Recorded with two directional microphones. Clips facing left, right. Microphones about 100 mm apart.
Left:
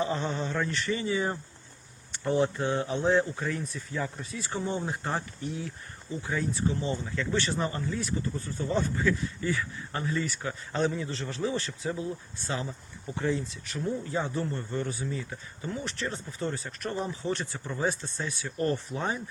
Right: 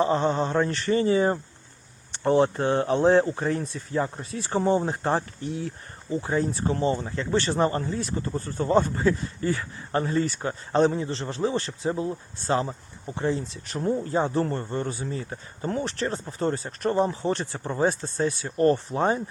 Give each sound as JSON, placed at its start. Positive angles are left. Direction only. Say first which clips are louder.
{"t": 0.0, "sound": "speech", "louder": "right 7 dB", "side_deg": -40}
{"t": 2.4, "sound": "speech", "louder": "right 5 dB", "side_deg": -45}
{"t": 3.3, "sound": "speech", "louder": "right 6 dB", "side_deg": -35}
{"t": 6.7, "sound": "speech", "louder": "right 5 dB", "side_deg": -50}